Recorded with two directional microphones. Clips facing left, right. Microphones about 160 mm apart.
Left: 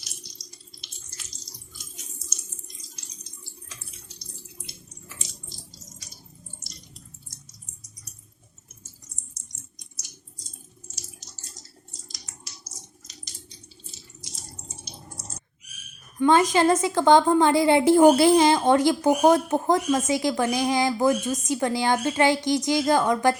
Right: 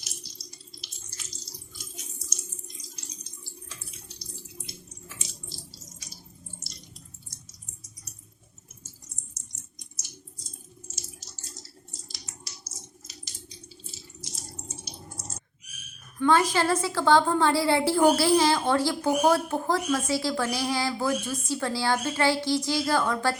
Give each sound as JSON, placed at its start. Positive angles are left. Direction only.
{"t": 13.1, "sound": "water", "side_deg": -5}
{"t": 16.1, "sound": "a woman's voice", "side_deg": 20}